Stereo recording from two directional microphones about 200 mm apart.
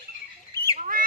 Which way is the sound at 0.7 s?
45° right (ahead or behind).